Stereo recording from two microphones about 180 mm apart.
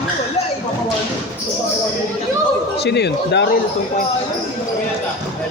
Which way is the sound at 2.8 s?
70° left (ahead or behind).